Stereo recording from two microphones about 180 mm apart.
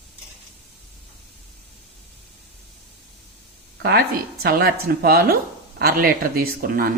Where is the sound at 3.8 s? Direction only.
60° right (ahead or behind).